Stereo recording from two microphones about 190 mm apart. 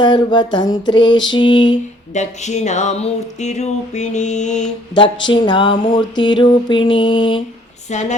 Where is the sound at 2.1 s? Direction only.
40° left (ahead or behind).